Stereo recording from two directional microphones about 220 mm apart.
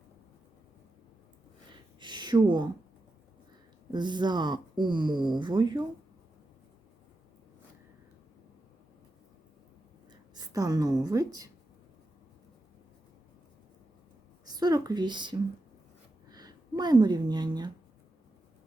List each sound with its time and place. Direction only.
2.0 s a sound: 20° right (ahead or behind)
3.9 s speech: 20° right (ahead or behind)
10.1 s a woman's voice: 15° right (ahead or behind)
14.4 s a woman's voice: 15° right (ahead or behind)